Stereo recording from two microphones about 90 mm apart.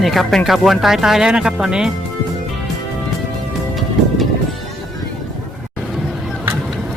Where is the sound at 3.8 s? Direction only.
Centre (ahead or behind).